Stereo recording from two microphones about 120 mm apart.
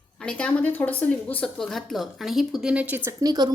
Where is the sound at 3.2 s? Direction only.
35° right (ahead or behind).